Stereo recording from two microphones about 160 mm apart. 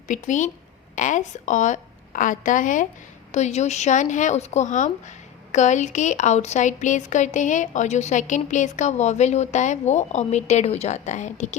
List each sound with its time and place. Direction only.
0.1 s a woman's voice: 50° left (ahead or behind)